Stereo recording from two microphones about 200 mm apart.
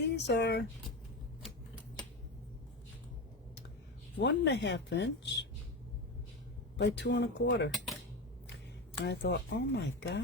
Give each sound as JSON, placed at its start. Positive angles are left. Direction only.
{"t": 0.0, "sound": "speech", "side_deg": 55}
{"t": 4.2, "sound": "speech", "side_deg": 60}
{"t": 6.7, "sound": "speech", "side_deg": 60}
{"t": 9.0, "sound": "speech", "side_deg": 60}